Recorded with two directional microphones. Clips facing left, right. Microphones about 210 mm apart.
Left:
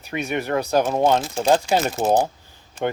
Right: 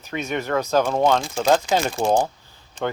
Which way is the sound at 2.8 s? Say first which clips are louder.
Left 2 dB; 20° left (ahead or behind).